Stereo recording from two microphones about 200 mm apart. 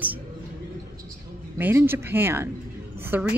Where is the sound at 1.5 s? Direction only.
10° right (ahead or behind).